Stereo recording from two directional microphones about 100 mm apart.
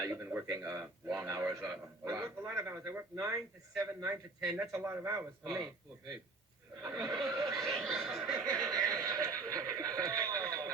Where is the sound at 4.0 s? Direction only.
40° right (ahead or behind).